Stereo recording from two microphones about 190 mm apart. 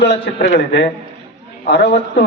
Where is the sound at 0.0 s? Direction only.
55° left (ahead or behind).